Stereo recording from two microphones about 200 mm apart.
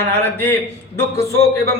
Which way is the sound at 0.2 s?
10° left (ahead or behind).